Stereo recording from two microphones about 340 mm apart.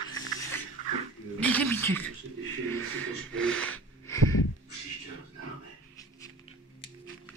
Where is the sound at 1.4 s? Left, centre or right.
Centre.